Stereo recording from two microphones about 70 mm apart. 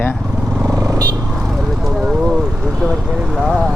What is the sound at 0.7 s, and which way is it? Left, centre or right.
Vehicle, right.